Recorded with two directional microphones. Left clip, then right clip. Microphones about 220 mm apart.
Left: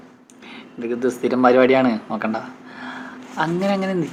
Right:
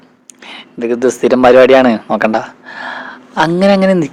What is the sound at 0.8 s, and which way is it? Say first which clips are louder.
Speech: right 10 dB; 50° right (ahead or behind).